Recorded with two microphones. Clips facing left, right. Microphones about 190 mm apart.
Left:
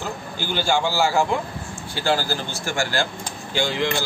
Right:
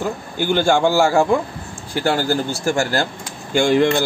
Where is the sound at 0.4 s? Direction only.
55° right (ahead or behind).